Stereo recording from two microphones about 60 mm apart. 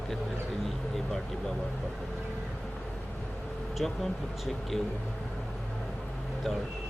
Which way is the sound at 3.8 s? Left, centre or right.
Centre.